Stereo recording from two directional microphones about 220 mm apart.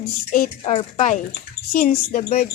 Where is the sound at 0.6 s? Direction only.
30° left (ahead or behind).